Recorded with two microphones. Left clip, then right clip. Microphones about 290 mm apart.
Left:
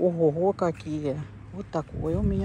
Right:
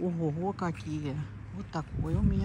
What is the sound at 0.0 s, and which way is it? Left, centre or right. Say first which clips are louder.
Speech: left 11 dB; left.